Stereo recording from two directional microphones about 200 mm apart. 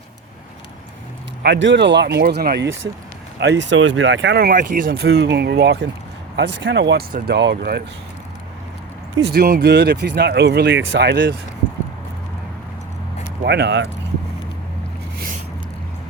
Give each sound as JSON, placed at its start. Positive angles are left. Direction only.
{"t": 1.4, "sound": "speech", "side_deg": -65}
{"t": 9.1, "sound": "speech", "side_deg": -55}
{"t": 13.4, "sound": "speech", "side_deg": -55}